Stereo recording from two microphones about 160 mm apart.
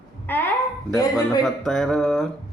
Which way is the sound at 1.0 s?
25° left (ahead or behind).